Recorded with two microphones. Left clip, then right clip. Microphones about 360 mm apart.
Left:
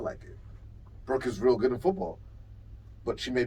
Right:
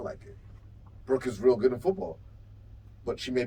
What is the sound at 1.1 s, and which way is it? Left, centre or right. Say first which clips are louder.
Speech: right 1 dB; centre.